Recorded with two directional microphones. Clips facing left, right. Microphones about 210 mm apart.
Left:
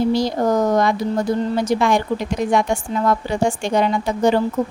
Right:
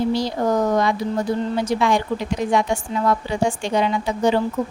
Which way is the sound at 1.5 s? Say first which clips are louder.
Left 1 dB; 45° left (ahead or behind).